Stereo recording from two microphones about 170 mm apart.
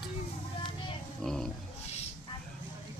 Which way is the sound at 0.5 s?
30° left (ahead or behind).